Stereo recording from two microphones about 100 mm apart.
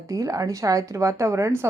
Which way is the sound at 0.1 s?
35° right (ahead or behind).